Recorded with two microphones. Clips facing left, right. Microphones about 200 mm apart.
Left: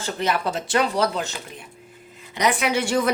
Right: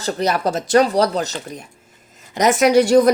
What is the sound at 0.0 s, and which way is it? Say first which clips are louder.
Speech: right 5 dB; 40° right (ahead or behind).